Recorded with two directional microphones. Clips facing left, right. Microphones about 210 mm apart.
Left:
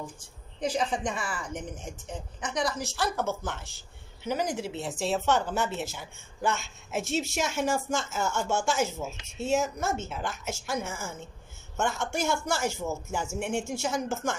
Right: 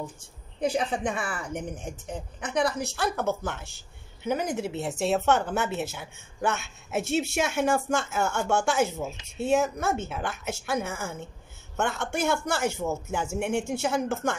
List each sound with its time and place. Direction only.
0.6 s speech: 60° right (ahead or behind)